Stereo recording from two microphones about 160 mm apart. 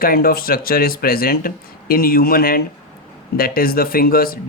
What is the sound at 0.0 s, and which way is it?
Speech, 65° left (ahead or behind).